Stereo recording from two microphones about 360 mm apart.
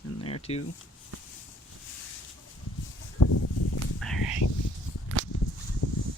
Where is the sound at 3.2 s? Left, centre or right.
Left.